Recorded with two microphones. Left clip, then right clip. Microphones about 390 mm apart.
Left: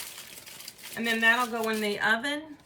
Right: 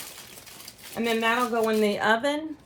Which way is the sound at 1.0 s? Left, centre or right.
Centre.